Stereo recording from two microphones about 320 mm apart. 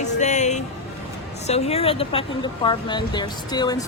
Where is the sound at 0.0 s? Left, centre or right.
Left.